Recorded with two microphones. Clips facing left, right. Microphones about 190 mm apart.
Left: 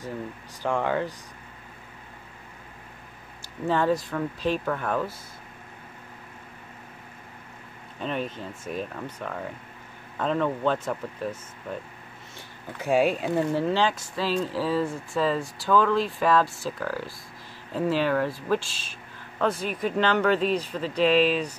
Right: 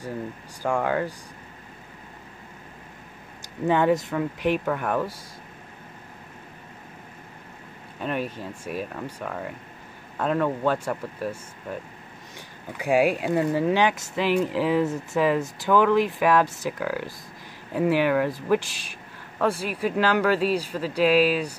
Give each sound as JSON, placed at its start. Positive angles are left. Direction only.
{"t": 0.6, "sound": "speech", "side_deg": -10}
{"t": 3.6, "sound": "speech", "side_deg": -15}
{"t": 8.0, "sound": "speech", "side_deg": -10}